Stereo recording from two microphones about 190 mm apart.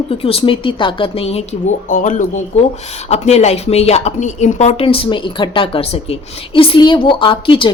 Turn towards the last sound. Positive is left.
turn(degrees=25)  # may be behind; listen again after turning